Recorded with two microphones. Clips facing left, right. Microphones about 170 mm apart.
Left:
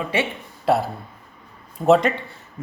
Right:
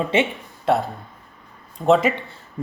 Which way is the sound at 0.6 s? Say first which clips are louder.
Even; centre (ahead or behind).